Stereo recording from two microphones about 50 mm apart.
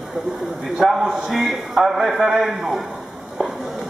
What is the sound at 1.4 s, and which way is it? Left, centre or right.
A man's voice, centre.